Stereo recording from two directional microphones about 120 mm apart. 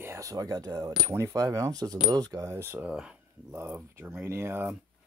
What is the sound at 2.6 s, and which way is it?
Speech, 20° right (ahead or behind).